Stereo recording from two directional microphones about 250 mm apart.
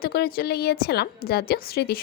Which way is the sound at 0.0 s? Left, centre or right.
Left.